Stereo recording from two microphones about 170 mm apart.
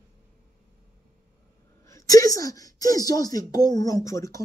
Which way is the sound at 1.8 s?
20° left (ahead or behind).